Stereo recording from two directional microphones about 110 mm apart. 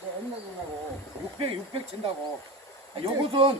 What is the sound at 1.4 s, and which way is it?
Speech, 55° right (ahead or behind).